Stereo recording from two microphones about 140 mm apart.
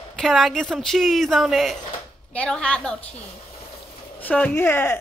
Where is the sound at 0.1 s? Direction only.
Centre (ahead or behind).